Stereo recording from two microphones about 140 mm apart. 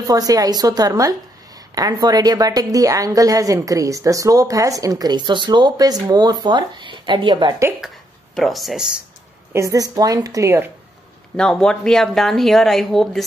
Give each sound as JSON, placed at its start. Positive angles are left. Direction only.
{"t": 0.0, "sound": "a woman's voice", "side_deg": -25}
{"t": 8.4, "sound": "speech", "side_deg": 0}
{"t": 9.5, "sound": "a woman's voice", "side_deg": -20}
{"t": 11.3, "sound": "speech", "side_deg": 5}